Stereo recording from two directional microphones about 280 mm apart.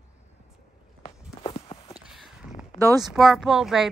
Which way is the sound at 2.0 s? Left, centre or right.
Centre.